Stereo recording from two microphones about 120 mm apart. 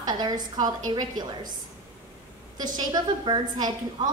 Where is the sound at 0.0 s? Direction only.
35° right (ahead or behind).